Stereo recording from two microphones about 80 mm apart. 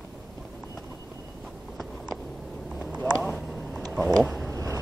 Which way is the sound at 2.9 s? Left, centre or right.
Centre.